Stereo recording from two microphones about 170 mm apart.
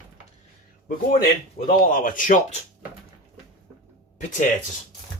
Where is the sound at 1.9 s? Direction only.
50° left (ahead or behind).